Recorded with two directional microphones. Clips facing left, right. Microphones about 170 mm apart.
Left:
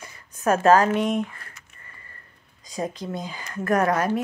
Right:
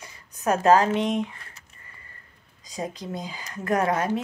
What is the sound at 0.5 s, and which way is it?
Speech, 20° right (ahead or behind).